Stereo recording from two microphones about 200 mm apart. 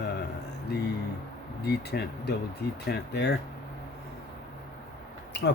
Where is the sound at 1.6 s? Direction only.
55° left (ahead or behind).